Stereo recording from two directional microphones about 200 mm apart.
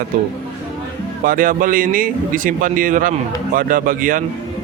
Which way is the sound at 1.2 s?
45° right (ahead or behind).